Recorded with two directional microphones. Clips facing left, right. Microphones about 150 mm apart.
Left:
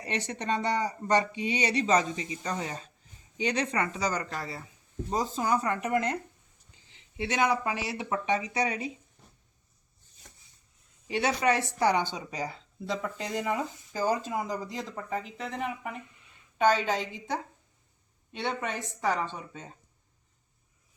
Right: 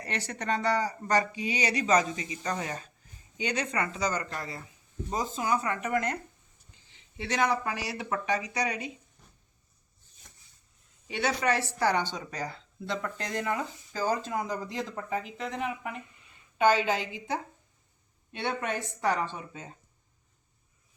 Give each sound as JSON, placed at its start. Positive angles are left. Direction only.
{"t": 0.0, "sound": "speech", "side_deg": 20}
{"t": 7.2, "sound": "speech", "side_deg": 20}
{"t": 11.1, "sound": "speech", "side_deg": 30}
{"t": 11.5, "sound": "a woman's voice", "side_deg": 15}